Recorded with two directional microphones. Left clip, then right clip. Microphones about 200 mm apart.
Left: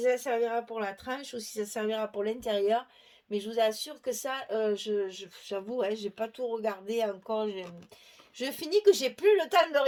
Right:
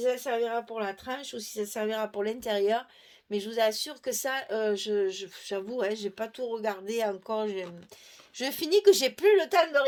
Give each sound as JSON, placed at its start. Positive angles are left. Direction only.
{"t": 0.0, "sound": "speech", "side_deg": -30}